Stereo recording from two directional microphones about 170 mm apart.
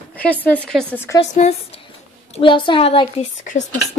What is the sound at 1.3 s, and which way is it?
Speech, 40° left (ahead or behind).